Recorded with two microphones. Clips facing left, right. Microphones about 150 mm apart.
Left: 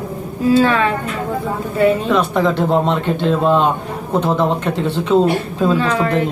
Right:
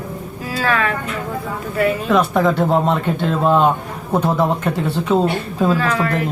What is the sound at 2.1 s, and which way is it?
Speech, centre (ahead or behind).